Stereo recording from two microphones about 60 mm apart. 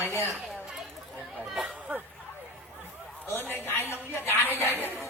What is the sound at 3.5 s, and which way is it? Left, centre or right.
A woman's voice, left.